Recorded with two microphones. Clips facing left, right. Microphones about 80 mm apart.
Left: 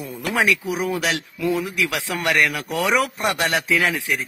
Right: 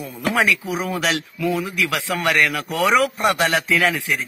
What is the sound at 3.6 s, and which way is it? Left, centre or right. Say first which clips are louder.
Speech: right 1 dB; centre.